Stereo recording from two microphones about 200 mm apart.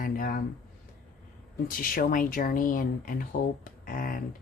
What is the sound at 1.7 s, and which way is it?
Speech, 45° left (ahead or behind).